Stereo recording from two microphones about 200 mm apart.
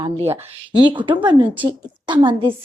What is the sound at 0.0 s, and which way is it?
A woman's voice, 30° right (ahead or behind).